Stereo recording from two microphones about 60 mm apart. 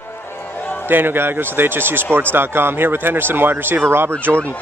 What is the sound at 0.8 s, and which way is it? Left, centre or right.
Speech, right.